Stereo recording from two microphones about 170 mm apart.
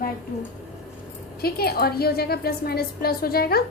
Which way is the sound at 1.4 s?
65° left (ahead or behind).